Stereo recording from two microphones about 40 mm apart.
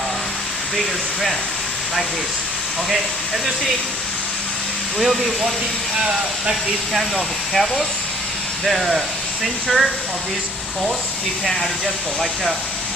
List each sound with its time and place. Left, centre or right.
0.8 s speech: centre
4.9 s speech: centre
6.9 s speech: centre